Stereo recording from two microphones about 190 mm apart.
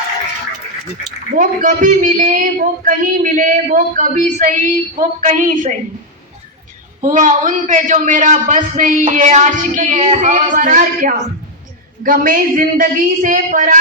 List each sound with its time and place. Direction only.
1.4 s speech: 45° right (ahead or behind)
7.0 s a man's voice: 45° right (ahead or behind)